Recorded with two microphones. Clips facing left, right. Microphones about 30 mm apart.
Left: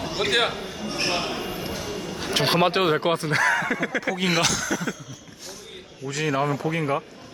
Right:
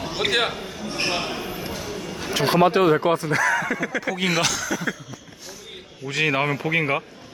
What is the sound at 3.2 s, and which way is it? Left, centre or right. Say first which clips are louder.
Speech: even; left.